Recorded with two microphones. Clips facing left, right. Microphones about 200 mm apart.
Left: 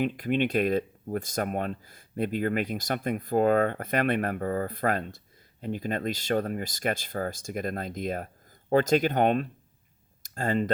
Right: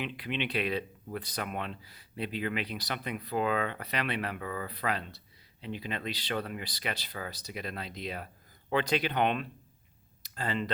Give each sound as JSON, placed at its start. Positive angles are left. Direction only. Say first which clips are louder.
{"t": 0.0, "sound": "speech", "louder": "left 9 dB", "side_deg": 45}